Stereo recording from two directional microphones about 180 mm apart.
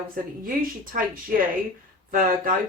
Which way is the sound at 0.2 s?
50° right (ahead or behind).